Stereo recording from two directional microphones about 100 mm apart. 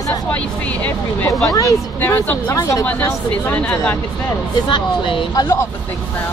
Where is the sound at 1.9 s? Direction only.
20° left (ahead or behind).